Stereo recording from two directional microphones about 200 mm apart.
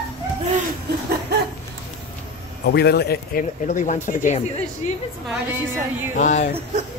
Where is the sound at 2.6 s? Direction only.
55° left (ahead or behind); by 4.9 s 35° left (ahead or behind).